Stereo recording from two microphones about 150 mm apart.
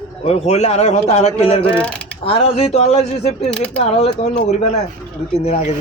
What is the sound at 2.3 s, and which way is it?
Speech, 40° left (ahead or behind).